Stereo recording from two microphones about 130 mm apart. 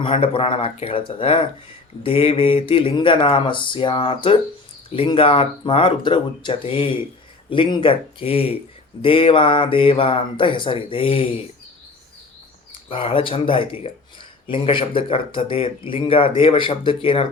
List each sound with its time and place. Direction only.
0.0 s speech: 45° left (ahead or behind)
12.9 s speech: 45° left (ahead or behind)